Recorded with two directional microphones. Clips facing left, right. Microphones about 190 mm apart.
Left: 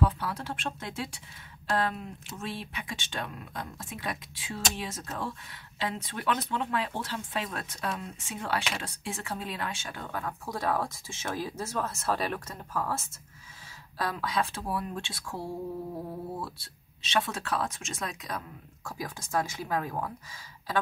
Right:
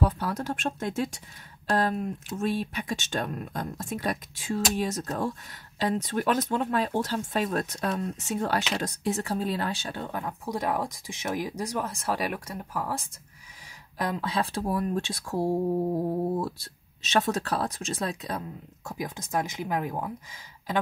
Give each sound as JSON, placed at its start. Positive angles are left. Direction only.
{"t": 0.0, "sound": "speech", "side_deg": -40}
{"t": 10.0, "sound": "speech", "side_deg": -20}
{"t": 18.9, "sound": "speech", "side_deg": -20}